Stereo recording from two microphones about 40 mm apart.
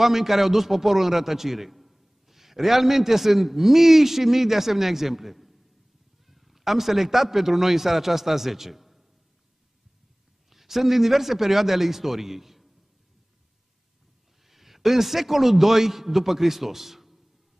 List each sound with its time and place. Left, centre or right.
0.0 s a man's voice: centre
10.5 s a man's voice: centre
14.4 s a man's voice: centre